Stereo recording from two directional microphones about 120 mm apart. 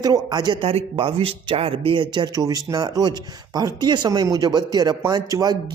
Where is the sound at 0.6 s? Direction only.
50° right (ahead or behind).